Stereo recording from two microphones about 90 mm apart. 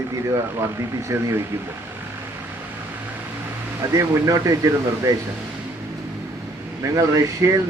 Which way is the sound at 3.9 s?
40° right (ahead or behind).